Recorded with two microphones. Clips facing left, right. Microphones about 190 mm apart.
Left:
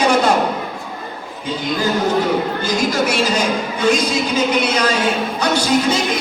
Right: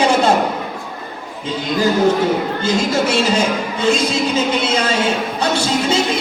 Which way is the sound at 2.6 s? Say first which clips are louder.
Right 1 dB; 25° right (ahead or behind).